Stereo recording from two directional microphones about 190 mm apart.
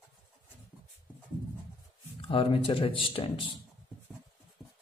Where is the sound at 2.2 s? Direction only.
30° left (ahead or behind).